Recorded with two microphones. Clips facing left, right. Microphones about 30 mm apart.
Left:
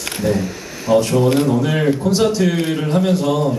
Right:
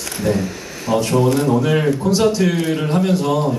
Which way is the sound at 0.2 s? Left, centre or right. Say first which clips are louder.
Even; centre.